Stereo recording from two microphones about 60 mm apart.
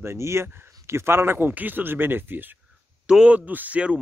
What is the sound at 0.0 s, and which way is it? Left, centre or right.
Speech, right.